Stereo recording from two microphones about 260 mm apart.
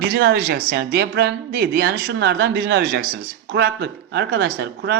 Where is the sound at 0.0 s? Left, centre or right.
Right.